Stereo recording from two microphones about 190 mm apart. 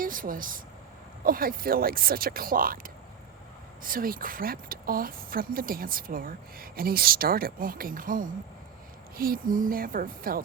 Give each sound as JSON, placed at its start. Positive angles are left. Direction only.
{"t": 0.0, "sound": "speech", "side_deg": -45}